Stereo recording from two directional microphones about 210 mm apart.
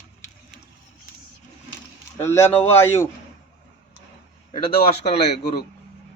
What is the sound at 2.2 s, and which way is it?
Speech, 10° left (ahead or behind).